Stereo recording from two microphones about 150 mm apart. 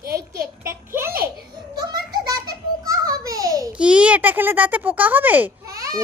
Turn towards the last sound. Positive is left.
turn(degrees=-20)  # may be behind; listen again after turning